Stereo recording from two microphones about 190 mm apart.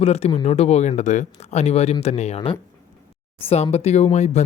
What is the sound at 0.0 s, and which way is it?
Speech, 35° left (ahead or behind).